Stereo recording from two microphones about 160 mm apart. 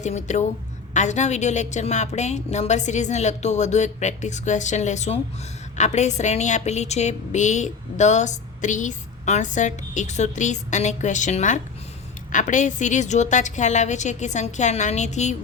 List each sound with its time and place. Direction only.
0.0 s a woman's voice: 50° left (ahead or behind)